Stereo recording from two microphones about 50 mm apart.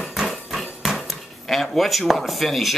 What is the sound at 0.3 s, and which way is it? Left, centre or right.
Dishes, centre.